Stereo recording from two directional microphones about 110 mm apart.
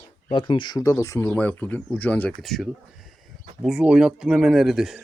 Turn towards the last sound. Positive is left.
turn(degrees=-5)  # may be behind; listen again after turning